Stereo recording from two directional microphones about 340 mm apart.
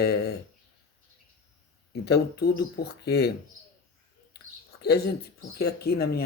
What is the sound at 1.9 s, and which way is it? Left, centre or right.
Speech, left.